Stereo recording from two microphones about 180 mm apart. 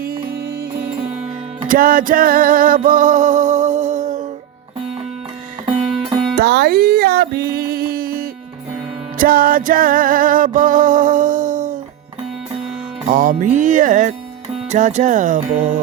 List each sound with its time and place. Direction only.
1.6 s music: 50° right (ahead or behind)
6.3 s music: 65° right (ahead or behind); by 11.8 s 45° right (ahead or behind)
13.1 s music: 50° right (ahead or behind)